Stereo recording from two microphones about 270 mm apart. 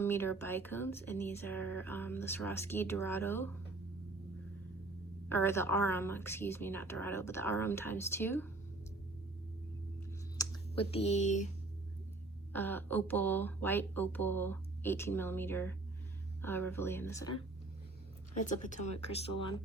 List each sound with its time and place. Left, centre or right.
0.0 s speech: centre
5.3 s speech: centre
10.3 s clicking: left
12.5 s speech: centre
18.4 s speech: left